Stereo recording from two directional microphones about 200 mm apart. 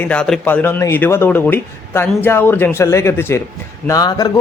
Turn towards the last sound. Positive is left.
turn(degrees=20)  # may be behind; listen again after turning